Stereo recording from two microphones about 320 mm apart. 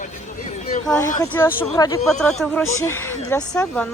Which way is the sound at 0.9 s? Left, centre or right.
Centre.